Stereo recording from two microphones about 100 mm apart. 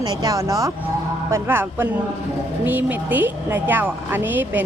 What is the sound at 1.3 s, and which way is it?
A woman's voice, 20° right (ahead or behind).